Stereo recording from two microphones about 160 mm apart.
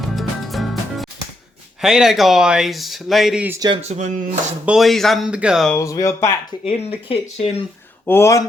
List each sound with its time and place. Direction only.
0.2 s music: centre (ahead or behind)
1.8 s speech: 5° right (ahead or behind)
3.8 s speech: 45° right (ahead or behind)
4.6 s speech: 5° right (ahead or behind)
5.7 s speech: 20° left (ahead or behind)
6.7 s speech: 40° left (ahead or behind)
8.0 s speech: 15° left (ahead or behind)